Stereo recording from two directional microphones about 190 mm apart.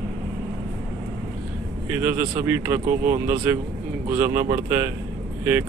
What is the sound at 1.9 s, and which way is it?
Speech, 15° right (ahead or behind).